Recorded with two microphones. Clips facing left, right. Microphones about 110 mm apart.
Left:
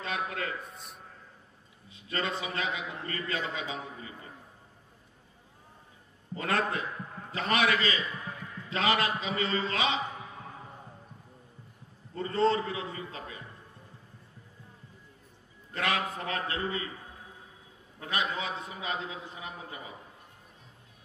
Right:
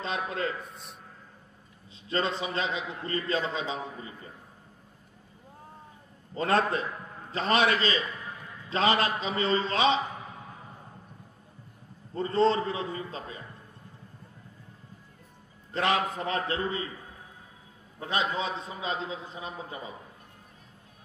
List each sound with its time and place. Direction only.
0.0 s a man's voice: 25° right (ahead or behind)
0.7 s a man's voice: centre (ahead or behind)
1.9 s a man's voice: 25° right (ahead or behind)
6.3 s a man's voice: 30° right (ahead or behind)
12.2 s a man's voice: 30° right (ahead or behind)
15.7 s a man's voice: 25° right (ahead or behind)
18.0 s a man's voice: 25° right (ahead or behind)